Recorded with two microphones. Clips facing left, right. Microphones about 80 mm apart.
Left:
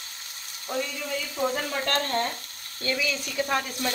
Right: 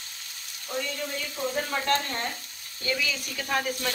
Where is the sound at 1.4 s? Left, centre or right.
Left.